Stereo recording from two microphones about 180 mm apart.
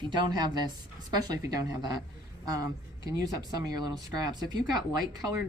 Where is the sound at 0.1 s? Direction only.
25° right (ahead or behind).